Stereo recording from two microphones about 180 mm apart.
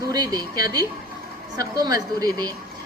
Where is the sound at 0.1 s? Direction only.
20° right (ahead or behind).